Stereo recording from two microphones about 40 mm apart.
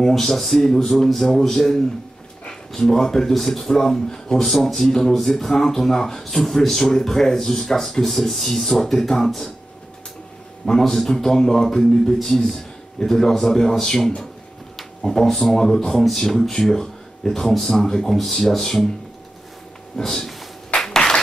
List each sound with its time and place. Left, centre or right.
0.1 s a man's voice: centre
10.7 s speech: centre
18.1 s a man's voice: centre
20.0 s speech: centre
20.8 s clapping: centre